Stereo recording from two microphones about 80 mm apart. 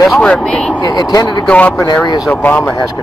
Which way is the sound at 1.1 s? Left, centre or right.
Left.